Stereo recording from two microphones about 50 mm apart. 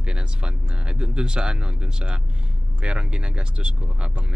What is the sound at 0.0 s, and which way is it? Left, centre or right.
Speech, centre.